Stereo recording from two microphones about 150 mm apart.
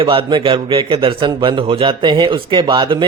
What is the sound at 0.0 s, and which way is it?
A man's voice, 35° right (ahead or behind).